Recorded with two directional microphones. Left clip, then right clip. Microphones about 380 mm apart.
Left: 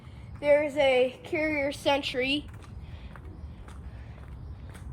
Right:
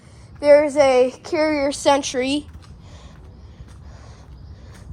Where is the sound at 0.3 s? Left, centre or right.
Right.